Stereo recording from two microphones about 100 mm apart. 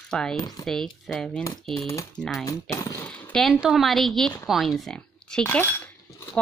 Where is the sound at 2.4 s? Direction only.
30° left (ahead or behind).